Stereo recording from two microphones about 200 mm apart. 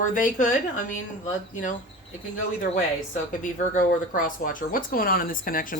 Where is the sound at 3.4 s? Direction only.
40° left (ahead or behind).